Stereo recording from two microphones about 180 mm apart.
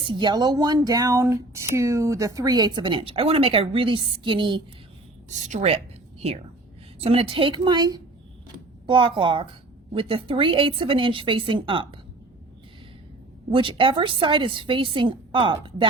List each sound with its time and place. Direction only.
0.1 s speech: 25° right (ahead or behind)
5.3 s a woman's voice: 40° right (ahead or behind)
13.5 s speech: 30° right (ahead or behind)